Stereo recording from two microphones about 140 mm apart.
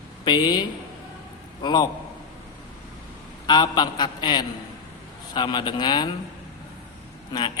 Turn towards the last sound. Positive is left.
turn(degrees=30)  # may be behind; listen again after turning